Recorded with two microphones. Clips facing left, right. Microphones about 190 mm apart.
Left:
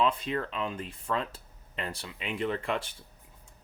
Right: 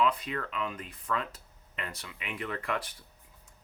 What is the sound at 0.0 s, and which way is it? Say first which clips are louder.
Speech: left 1 dB; 30° left (ahead or behind).